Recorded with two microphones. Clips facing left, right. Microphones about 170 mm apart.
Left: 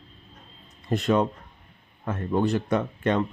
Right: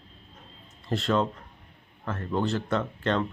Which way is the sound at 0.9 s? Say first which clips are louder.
Left 3 dB; 15° left (ahead or behind).